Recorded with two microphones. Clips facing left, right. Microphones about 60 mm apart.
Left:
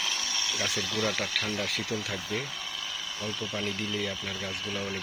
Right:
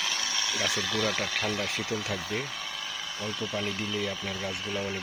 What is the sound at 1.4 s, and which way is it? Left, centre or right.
Speech, right.